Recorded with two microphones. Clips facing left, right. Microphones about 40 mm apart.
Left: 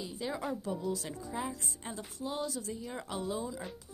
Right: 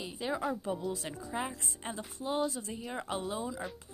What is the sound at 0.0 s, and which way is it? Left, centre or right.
A woman's voice, right.